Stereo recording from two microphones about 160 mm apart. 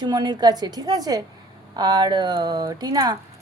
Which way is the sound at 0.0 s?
25° right (ahead or behind).